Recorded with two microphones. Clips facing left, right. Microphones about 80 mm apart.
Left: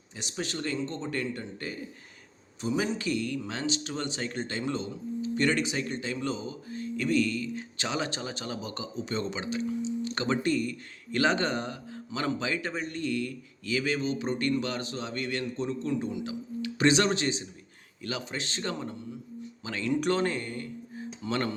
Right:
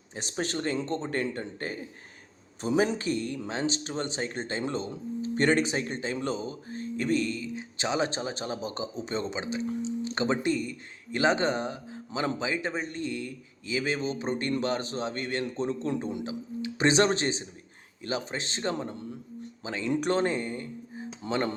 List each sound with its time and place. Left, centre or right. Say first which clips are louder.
0.1 s speech: right 3 dB; right
7.4 s a man's voice: right 2 dB; centre; by 15.9 s right
16.2 s a man's voice: even; right